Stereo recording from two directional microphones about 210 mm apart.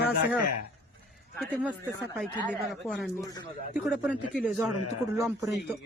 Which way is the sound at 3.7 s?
Centre (ahead or behind).